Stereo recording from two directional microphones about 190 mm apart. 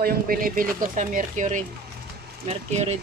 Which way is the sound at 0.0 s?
50° right (ahead or behind).